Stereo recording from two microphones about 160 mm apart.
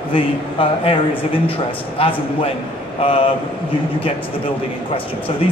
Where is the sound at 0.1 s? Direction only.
35° left (ahead or behind).